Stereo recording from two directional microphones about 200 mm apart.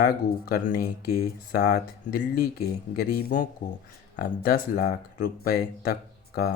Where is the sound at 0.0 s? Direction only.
50° left (ahead or behind).